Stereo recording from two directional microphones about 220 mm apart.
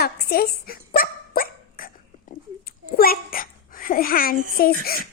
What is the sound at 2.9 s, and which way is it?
A child's voice, 40° left (ahead or behind).